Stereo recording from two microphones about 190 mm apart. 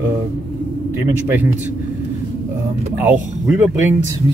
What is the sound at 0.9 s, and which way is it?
Speech, 10° right (ahead or behind).